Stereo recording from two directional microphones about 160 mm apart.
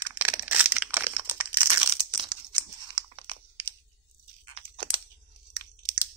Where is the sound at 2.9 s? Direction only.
30° right (ahead or behind).